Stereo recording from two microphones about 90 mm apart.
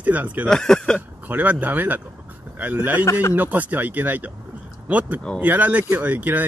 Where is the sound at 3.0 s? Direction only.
35° left (ahead or behind).